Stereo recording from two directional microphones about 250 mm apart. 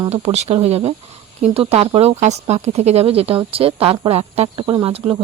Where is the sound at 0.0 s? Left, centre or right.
Right.